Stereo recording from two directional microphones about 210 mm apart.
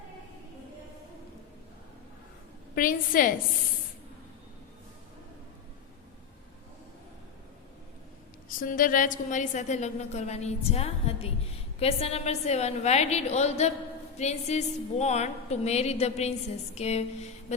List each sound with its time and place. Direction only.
2.7 s a woman's voice: 40° left (ahead or behind)
8.4 s a woman's voice: 40° left (ahead or behind)